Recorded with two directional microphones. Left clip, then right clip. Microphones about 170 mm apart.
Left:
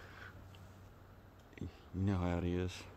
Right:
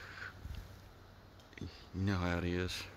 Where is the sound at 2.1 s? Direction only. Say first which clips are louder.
Right 2 dB; 15° left (ahead or behind).